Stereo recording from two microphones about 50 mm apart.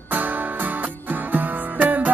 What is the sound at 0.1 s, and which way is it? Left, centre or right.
Music, right.